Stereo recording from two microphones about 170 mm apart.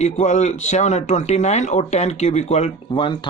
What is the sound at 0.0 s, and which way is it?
Speech, 45° left (ahead or behind).